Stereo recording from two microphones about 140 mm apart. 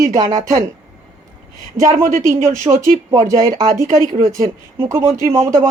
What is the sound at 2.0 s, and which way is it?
Speech, 75° right (ahead or behind).